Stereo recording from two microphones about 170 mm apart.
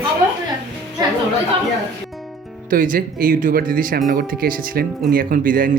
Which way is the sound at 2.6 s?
55° right (ahead or behind).